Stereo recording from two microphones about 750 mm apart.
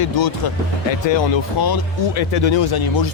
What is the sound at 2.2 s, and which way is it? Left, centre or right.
Speech, left.